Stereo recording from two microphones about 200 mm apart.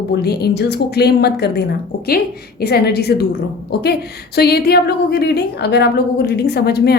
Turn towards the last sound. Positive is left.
turn(degrees=55)  # may be behind; listen again after turning